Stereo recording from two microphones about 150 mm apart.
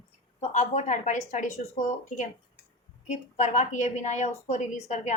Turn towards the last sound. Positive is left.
turn(degrees=50)  # may be behind; listen again after turning